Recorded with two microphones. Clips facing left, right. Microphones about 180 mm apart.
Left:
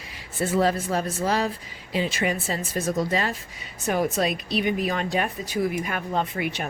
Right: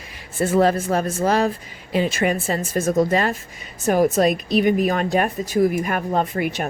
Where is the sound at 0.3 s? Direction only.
50° right (ahead or behind).